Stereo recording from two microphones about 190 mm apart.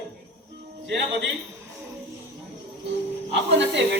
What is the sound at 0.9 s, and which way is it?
Speech, 65° right (ahead or behind).